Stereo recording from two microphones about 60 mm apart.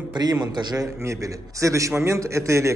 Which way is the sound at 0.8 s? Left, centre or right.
Right.